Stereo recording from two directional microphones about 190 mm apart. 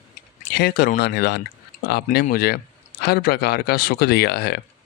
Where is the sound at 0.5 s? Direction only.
55° left (ahead or behind).